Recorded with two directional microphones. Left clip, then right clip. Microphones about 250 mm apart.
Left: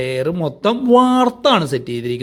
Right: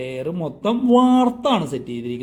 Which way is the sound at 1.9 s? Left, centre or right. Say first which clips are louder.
Left 6 dB; left.